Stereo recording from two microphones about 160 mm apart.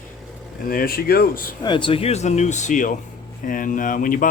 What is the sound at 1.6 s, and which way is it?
Speech, 30° left (ahead or behind).